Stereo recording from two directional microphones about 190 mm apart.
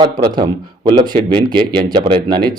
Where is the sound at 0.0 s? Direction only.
25° right (ahead or behind).